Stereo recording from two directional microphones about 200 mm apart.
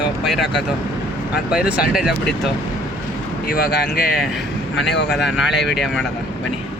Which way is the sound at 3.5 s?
50° left (ahead or behind).